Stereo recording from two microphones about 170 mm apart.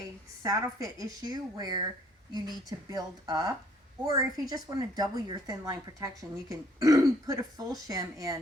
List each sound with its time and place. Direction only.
0.4 s a woman's voice: 20° right (ahead or behind)